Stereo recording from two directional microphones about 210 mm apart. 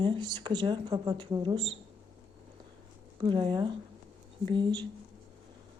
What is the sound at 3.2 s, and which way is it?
A woman's voice, 25° right (ahead or behind).